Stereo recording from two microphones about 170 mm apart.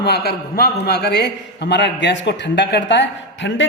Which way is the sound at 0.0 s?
75° left (ahead or behind).